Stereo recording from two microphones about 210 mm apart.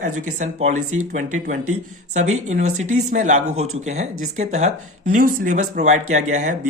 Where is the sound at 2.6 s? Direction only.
80° right.